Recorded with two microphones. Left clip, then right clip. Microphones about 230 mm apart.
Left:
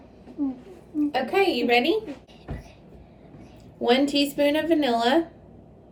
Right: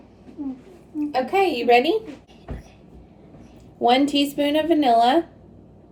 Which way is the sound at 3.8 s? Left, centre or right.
Centre.